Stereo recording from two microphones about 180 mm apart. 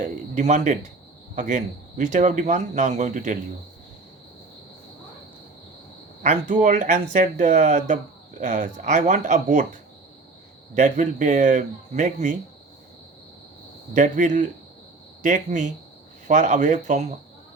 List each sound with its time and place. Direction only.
0.0 s speech: 40° right (ahead or behind)
6.2 s speech: 45° right (ahead or behind)
10.8 s speech: 45° right (ahead or behind)
13.9 s speech: 45° right (ahead or behind)